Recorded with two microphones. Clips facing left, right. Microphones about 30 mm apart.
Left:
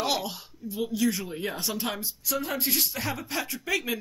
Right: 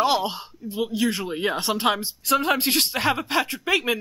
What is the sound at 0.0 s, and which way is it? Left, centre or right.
Speech, right.